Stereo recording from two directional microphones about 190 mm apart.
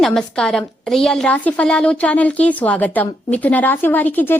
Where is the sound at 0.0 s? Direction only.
Centre (ahead or behind).